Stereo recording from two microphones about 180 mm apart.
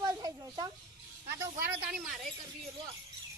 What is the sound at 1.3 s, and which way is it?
Speech, 15° right (ahead or behind).